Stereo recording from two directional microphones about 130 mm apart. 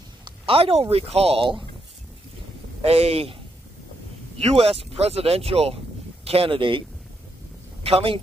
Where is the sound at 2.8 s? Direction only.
50° right (ahead or behind).